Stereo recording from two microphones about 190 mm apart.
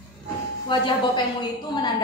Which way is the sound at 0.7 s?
25° left (ahead or behind).